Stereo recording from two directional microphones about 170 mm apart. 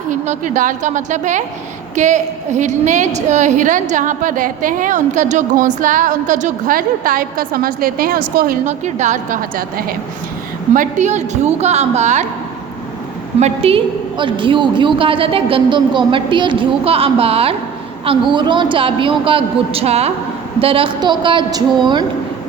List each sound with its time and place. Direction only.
0.1 s a woman's voice: 50° right (ahead or behind)
10.8 s a woman's voice: 45° right (ahead or behind)
13.4 s a woman's voice: 35° right (ahead or behind)